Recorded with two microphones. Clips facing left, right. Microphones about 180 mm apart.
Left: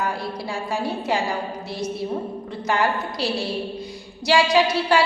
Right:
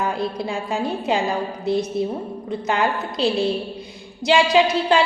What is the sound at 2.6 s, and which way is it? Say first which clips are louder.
A woman's voice: even; 20° right (ahead or behind).